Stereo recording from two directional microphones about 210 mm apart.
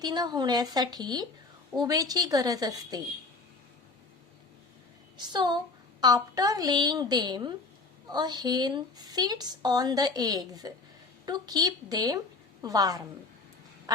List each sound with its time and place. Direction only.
0.0 s a woman's voice: 20° right (ahead or behind)
5.1 s a woman's voice: 20° right (ahead or behind)